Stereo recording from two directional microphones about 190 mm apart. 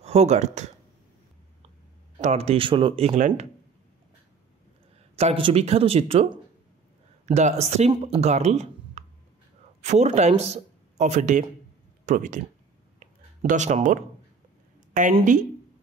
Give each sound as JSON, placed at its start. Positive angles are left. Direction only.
{"t": 0.0, "sound": "speech", "side_deg": -35}
{"t": 2.2, "sound": "speech", "side_deg": -35}
{"t": 5.1, "sound": "speech", "side_deg": -30}
{"t": 13.0, "sound": "a sound", "side_deg": -40}
{"t": 15.0, "sound": "a woman's voice", "side_deg": -40}